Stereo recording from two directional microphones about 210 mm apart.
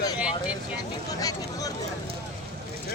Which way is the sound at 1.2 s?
15° left (ahead or behind).